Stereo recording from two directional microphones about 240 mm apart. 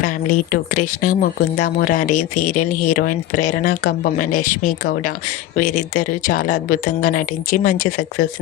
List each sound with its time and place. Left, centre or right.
0.5 s speech: left